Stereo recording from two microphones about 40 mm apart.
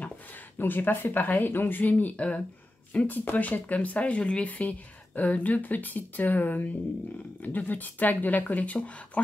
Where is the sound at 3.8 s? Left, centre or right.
Left.